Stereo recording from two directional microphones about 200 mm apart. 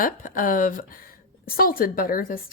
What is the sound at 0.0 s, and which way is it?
Speech, 40° left (ahead or behind).